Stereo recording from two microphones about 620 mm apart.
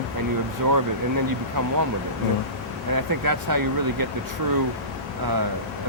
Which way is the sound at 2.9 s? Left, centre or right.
Right.